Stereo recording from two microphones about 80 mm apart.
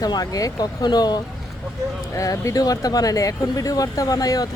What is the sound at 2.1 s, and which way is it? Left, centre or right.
Speech, left.